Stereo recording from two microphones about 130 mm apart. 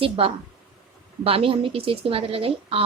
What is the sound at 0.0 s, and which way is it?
A woman's voice, 45° right (ahead or behind).